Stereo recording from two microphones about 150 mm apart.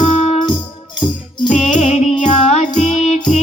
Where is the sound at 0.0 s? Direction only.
45° left (ahead or behind).